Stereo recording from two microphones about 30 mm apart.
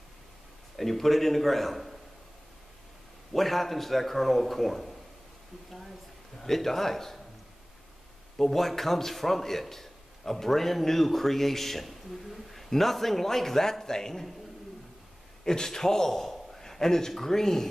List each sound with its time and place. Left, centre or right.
0.7 s speech: centre
3.3 s speech: centre
6.3 s a man's voice: centre
8.4 s a man's voice: centre
15.4 s a man's voice: left